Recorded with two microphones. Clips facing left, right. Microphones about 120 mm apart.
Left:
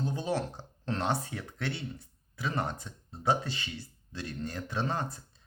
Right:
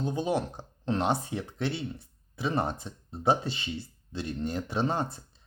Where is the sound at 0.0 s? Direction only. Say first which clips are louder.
Right 3 dB; 20° right (ahead or behind).